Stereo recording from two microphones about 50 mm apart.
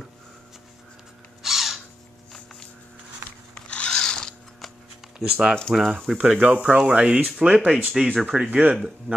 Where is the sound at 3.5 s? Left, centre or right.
Left.